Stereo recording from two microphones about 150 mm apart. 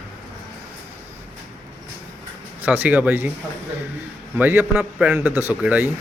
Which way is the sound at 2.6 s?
10° right (ahead or behind).